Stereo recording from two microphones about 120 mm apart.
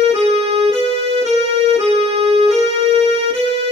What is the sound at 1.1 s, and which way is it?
Keyboard, 55° right (ahead or behind).